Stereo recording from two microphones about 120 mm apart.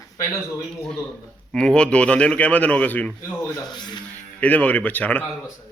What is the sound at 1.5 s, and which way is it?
Speech, 5° left (ahead or behind).